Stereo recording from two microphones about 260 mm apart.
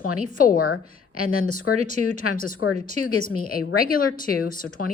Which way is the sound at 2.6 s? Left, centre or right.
Left.